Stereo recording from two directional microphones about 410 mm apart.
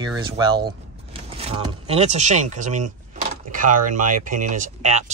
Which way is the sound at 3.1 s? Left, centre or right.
Centre.